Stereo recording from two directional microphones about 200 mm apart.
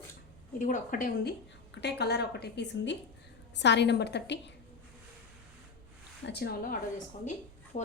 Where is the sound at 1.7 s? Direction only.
55° left (ahead or behind).